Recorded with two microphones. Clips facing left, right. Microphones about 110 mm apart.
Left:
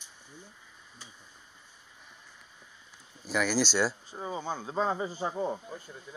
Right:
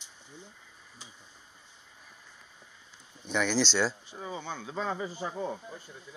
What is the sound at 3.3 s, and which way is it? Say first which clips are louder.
Speech: even; 5° left (ahead or behind).